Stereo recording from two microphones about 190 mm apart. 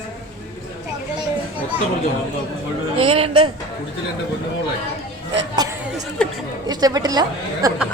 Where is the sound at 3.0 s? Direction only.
30° right (ahead or behind).